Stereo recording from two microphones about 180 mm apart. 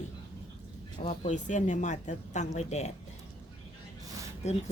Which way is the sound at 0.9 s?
40° left (ahead or behind).